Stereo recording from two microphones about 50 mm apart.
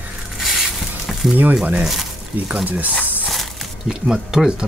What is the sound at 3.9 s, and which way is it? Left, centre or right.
Speech, centre.